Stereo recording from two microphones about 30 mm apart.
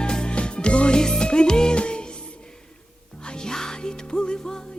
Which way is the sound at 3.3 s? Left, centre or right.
Left.